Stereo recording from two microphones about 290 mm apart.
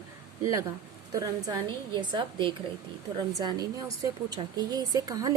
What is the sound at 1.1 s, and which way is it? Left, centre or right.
Speech, centre.